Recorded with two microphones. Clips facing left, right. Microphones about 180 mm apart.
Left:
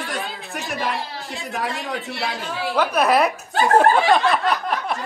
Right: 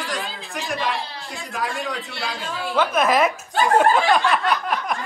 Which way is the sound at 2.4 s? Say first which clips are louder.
Even; centre (ahead or behind).